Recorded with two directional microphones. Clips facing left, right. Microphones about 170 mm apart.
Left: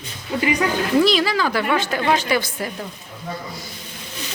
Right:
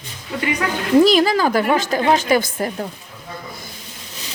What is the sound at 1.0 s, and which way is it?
Speech, 45° right (ahead or behind).